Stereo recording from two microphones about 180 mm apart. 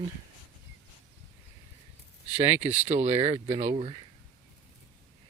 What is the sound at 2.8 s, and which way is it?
Speech, 40° right (ahead or behind).